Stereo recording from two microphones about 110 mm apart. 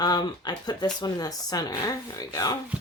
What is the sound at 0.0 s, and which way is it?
Speech, 40° left (ahead or behind).